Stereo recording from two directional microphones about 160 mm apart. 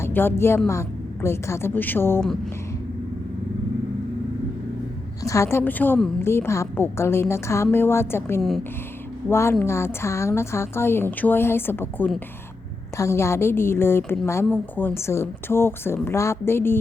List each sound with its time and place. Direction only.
0.0 s a woman's voice: 15° left (ahead or behind)
5.2 s a woman's voice: 20° left (ahead or behind)
8.4 s speech: centre (ahead or behind)
9.3 s a woman's voice: 15° left (ahead or behind)